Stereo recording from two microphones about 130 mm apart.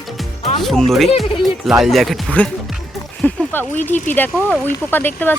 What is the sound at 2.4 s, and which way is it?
Speech, 10° left (ahead or behind).